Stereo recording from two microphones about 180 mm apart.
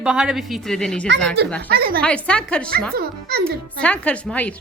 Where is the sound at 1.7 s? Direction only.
55° right (ahead or behind).